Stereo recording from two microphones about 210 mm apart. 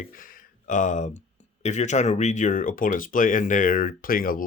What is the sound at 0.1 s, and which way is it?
Speech, 40° left (ahead or behind).